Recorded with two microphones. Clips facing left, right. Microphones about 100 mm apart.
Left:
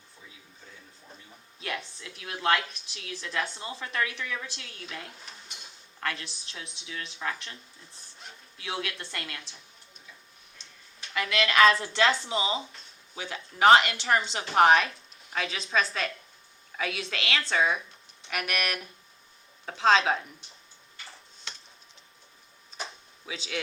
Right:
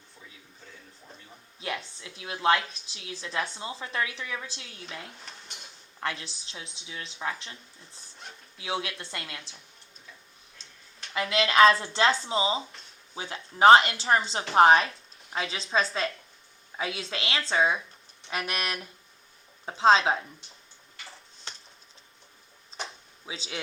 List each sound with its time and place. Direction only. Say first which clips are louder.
1.6 s a woman's voice: right 1 dB; 25° right (ahead or behind)
6.0 s a woman's voice: right 1 dB; 25° right (ahead or behind)
8.5 s a woman's voice: right 2 dB; 25° right (ahead or behind)
11.1 s a woman's voice: right 1 dB; 25° right (ahead or behind)
23.2 s a woman's voice: left 1 dB; 25° right (ahead or behind)